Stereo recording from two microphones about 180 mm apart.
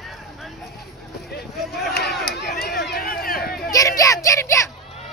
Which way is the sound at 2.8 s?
60° left (ahead or behind).